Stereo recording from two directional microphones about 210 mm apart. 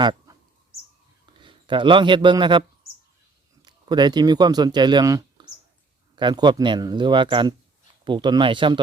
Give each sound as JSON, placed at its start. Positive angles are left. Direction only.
{"t": 0.0, "sound": "bird", "side_deg": -20}
{"t": 1.4, "sound": "speech", "side_deg": -20}